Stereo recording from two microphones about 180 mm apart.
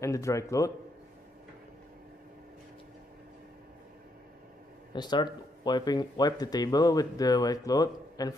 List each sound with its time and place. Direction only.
0.0 s a man's voice: 15° left (ahead or behind)
4.9 s speech: 25° left (ahead or behind)